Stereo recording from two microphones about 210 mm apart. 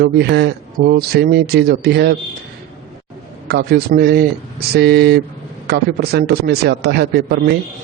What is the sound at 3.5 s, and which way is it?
A man's voice, 50° right (ahead or behind).